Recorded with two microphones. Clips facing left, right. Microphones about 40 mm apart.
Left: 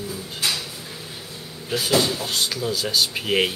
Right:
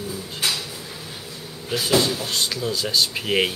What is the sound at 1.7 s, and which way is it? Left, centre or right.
Speech, centre.